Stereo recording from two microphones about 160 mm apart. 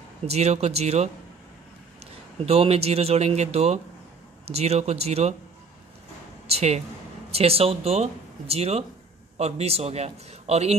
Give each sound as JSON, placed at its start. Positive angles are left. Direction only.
{"t": 0.3, "sound": "speech", "side_deg": -40}
{"t": 2.4, "sound": "speech", "side_deg": -40}
{"t": 6.4, "sound": "speech", "side_deg": -40}